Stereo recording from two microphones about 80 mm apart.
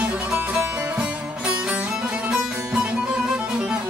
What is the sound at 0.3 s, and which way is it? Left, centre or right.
Music, centre.